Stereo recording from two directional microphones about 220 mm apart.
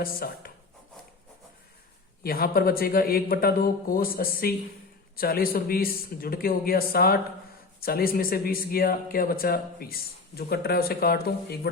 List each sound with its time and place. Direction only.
0.0 s speech: 40° left (ahead or behind)
2.2 s speech: 45° left (ahead or behind)